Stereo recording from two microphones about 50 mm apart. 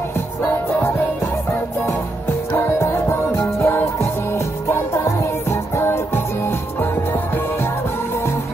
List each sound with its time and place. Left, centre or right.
2.5 s music: left